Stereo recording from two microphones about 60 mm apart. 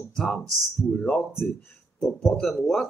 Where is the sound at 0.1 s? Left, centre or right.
Centre.